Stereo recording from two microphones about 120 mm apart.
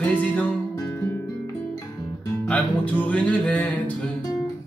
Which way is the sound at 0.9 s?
20° left (ahead or behind).